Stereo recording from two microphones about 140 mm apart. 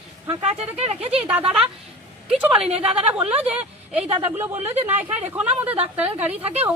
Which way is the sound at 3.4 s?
10° right (ahead or behind).